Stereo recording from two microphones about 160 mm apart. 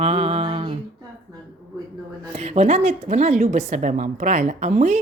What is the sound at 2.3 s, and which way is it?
A woman's voice, 45° right (ahead or behind).